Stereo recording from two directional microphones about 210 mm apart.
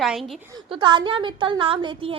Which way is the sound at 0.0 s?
Centre (ahead or behind).